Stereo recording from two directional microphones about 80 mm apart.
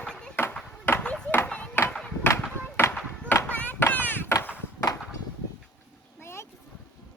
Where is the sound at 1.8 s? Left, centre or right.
Left.